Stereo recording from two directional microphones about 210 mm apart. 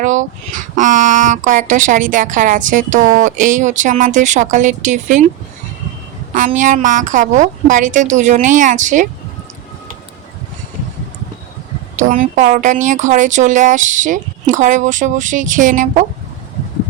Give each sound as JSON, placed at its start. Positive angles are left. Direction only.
{"t": 0.0, "sound": "speech", "side_deg": -35}
{"t": 6.3, "sound": "speech", "side_deg": -40}
{"t": 11.9, "sound": "speech", "side_deg": -40}